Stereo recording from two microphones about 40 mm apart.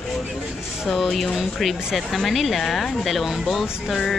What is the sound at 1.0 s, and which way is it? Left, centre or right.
Speech, centre.